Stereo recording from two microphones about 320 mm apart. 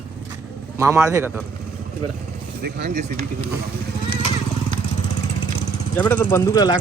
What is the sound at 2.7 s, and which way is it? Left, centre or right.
Speech, right.